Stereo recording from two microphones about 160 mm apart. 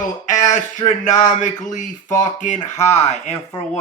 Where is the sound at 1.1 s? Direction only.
50° left (ahead or behind).